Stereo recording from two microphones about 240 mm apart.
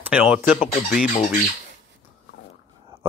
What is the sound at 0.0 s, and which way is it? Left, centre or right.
Fowl, centre.